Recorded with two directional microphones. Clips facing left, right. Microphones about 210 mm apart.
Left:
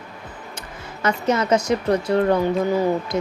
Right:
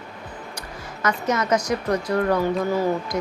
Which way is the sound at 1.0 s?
30° left (ahead or behind).